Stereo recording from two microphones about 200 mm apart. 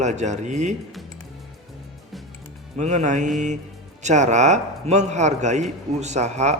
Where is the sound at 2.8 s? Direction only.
35° right (ahead or behind).